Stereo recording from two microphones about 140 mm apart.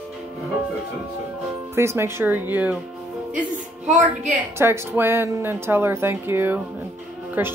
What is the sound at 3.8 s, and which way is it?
Speech, 60° right (ahead or behind).